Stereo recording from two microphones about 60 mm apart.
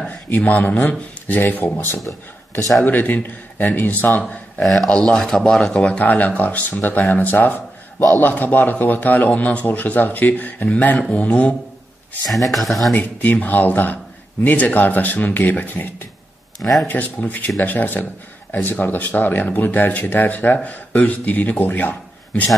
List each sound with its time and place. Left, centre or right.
0.5 s speech: left
4.6 s speech: centre
5.8 s speech: left
12.4 s speech: centre
12.9 s speech: left